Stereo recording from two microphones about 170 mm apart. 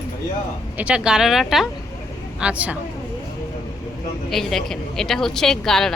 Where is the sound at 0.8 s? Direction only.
5° right (ahead or behind).